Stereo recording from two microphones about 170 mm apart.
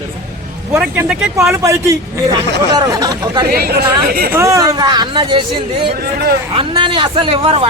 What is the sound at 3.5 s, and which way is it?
Speech, 65° right (ahead or behind).